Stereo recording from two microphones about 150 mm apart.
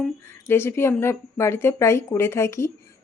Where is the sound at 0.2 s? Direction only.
15° left (ahead or behind).